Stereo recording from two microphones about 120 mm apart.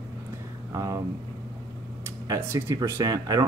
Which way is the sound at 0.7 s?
25° right (ahead or behind).